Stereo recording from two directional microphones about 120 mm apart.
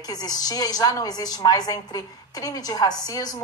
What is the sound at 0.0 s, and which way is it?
A woman's voice, 35° left (ahead or behind).